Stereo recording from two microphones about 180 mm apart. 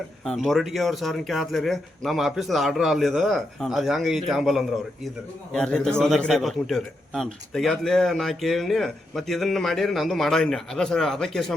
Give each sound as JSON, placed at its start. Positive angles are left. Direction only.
{"t": 0.3, "sound": "a man's voice", "side_deg": 0}